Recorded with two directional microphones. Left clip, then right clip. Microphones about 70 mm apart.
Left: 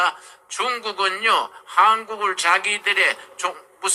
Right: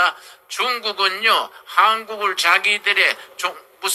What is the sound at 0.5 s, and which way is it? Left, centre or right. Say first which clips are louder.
A man's voice: right 2 dB; centre.